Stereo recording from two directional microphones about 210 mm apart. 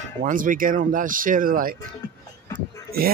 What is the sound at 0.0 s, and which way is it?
Speech, 40° right (ahead or behind).